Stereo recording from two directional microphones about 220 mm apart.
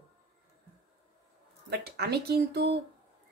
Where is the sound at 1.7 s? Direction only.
50° right (ahead or behind).